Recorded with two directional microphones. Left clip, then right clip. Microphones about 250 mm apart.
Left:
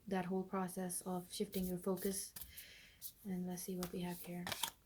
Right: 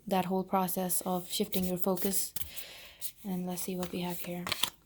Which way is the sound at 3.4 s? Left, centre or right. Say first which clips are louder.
Right 9 dB; right.